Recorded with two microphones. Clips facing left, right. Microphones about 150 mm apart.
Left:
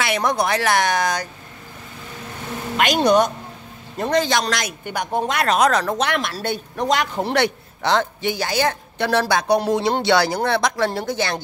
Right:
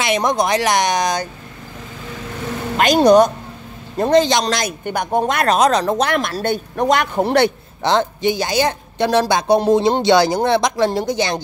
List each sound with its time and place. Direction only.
0.0 s a woman's voice: 20° right (ahead or behind)
2.8 s a woman's voice: 35° right (ahead or behind)
4.0 s a woman's voice: 25° right (ahead or behind)
4.8 s speech: 50° right (ahead or behind)
5.6 s a woman's voice: 20° right (ahead or behind)
5.9 s speech: 40° right (ahead or behind)
7.3 s a woman's voice: 25° right (ahead or behind)